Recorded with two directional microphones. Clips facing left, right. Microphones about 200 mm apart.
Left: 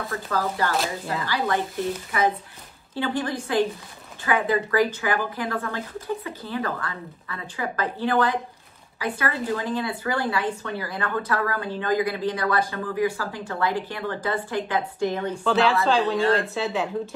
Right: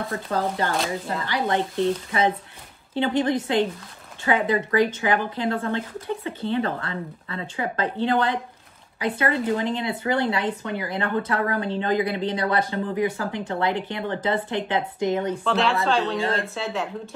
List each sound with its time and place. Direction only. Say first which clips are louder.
0.1 s speech: even; 25° right (ahead or behind)
15.4 s a woman's voice: left 5 dB; centre (ahead or behind)